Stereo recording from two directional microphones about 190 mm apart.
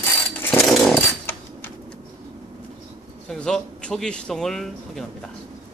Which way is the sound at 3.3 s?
5° left (ahead or behind).